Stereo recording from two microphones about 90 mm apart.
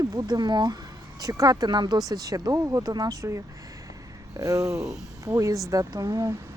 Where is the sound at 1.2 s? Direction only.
45° right (ahead or behind).